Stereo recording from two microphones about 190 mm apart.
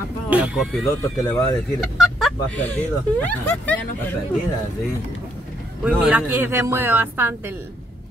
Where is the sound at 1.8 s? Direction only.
Centre (ahead or behind).